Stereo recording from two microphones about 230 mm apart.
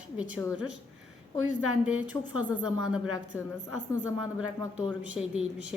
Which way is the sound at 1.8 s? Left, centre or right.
Centre.